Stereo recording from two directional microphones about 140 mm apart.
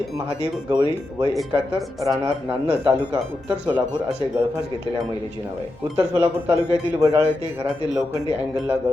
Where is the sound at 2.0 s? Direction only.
15° right (ahead or behind).